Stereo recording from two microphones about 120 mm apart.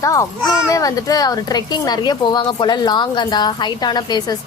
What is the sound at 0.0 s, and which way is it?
A child's voice, 25° left (ahead or behind).